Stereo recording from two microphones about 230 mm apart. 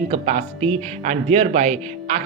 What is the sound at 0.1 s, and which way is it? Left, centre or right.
Speech, right.